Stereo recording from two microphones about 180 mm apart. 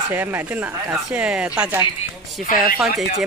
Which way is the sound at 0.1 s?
10° right (ahead or behind).